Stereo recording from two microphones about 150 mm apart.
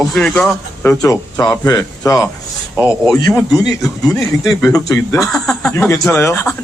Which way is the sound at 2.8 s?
5° right (ahead or behind).